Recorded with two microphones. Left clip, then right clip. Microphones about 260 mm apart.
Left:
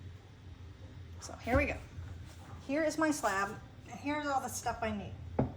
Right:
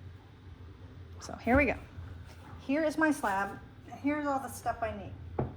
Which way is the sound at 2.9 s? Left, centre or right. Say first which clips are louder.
Right 3 dB; right.